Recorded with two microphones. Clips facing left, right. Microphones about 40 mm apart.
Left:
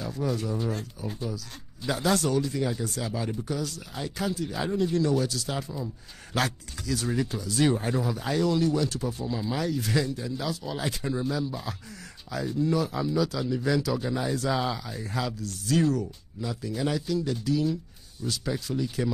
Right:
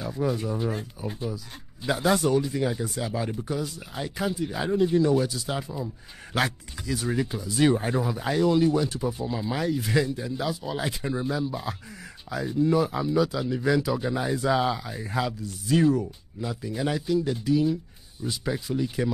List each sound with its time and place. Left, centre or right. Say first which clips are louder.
0.0 s speech: right 2 dB; centre